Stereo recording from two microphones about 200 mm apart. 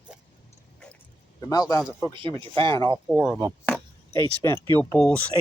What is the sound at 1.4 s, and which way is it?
Speech, 15° left (ahead or behind).